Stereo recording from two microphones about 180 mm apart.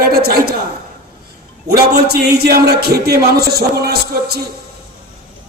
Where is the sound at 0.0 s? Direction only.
60° right (ahead or behind).